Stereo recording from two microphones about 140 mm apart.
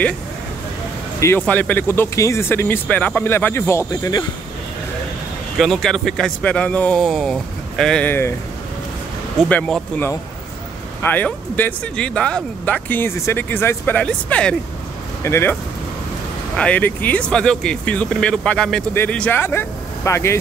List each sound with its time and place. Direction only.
1.2 s speech: 15° left (ahead or behind)
5.6 s a man's voice: centre (ahead or behind)
9.5 s speech: 10° left (ahead or behind)
15.2 s speech: 20° left (ahead or behind)
16.5 s speech: 10° left (ahead or behind)